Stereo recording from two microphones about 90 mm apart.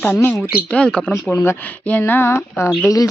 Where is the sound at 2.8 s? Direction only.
40° left (ahead or behind).